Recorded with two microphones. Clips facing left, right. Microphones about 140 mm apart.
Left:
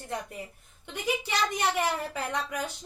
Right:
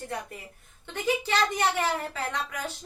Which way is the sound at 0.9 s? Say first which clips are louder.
Right 3 dB; 15° left (ahead or behind).